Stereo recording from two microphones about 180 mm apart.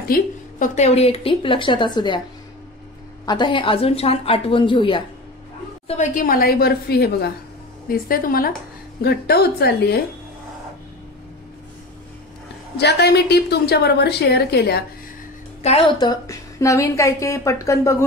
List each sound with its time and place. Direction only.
0.1 s a woman's voice: 45° left (ahead or behind); by 2.2 s 25° left (ahead or behind)
3.3 s a woman's voice: 25° left (ahead or behind)
5.9 s a woman's voice: 45° left (ahead or behind); by 9.9 s 60° left (ahead or behind)
12.7 s a woman's voice: 65° left (ahead or behind)
15.6 s a woman's voice: 30° left (ahead or behind); by 17.9 s 15° left (ahead or behind)